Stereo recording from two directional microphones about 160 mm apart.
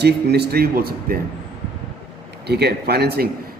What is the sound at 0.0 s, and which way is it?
A man's voice, 90° right.